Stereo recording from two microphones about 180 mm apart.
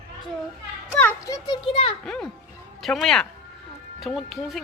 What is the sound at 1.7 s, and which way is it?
Speech, 35° left (ahead or behind).